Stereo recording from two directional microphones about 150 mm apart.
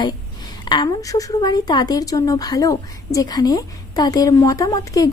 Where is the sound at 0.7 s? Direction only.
30° left (ahead or behind).